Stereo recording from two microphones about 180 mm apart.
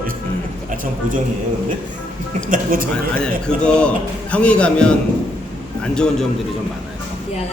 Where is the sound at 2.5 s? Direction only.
50° right (ahead or behind).